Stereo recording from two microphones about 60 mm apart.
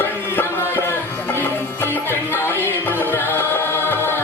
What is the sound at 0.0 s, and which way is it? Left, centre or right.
Music, left.